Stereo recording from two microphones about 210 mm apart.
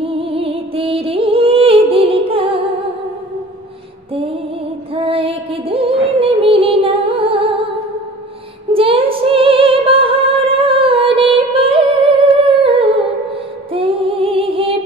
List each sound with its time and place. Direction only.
0.0 s music: 25° right (ahead or behind)
4.9 s music: 25° right (ahead or behind)
8.7 s music: 25° right (ahead or behind)
11.3 s humming: 25° right (ahead or behind)
13.7 s music: 25° right (ahead or behind)